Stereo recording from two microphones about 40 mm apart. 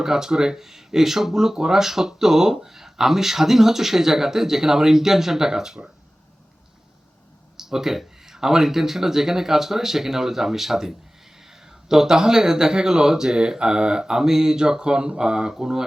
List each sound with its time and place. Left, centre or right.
0.0 s speech: centre
7.5 s speech: centre